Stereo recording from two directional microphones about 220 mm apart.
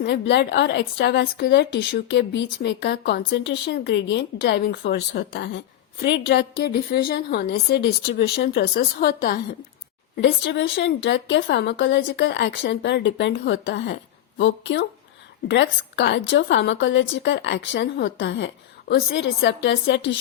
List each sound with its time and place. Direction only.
0.0 s a woman's voice: 50° left (ahead or behind)